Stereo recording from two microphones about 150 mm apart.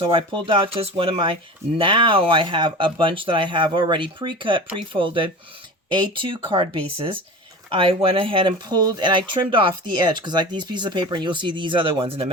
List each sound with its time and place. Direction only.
0.0 s speech: 35° right (ahead or behind)